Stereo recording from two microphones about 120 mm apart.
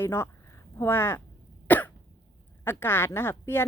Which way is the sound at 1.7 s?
15° left (ahead or behind).